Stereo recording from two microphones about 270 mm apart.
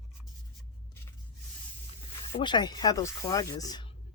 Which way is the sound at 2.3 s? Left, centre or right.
Centre.